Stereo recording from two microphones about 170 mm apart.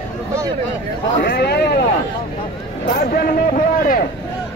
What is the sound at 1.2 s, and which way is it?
Speech, 75° left (ahead or behind).